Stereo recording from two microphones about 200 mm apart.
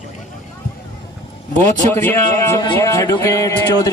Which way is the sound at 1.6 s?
10° left (ahead or behind).